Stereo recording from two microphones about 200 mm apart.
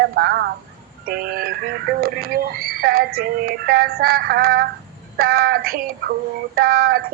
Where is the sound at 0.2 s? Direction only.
55° right (ahead or behind).